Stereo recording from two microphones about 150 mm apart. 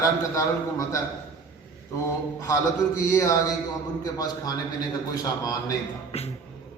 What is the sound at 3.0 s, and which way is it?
A man's voice, 20° left (ahead or behind).